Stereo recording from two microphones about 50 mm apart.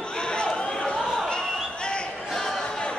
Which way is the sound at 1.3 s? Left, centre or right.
Centre.